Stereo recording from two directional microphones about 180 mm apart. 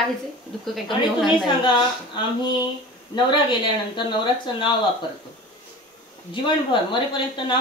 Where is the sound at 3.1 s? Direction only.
25° left (ahead or behind).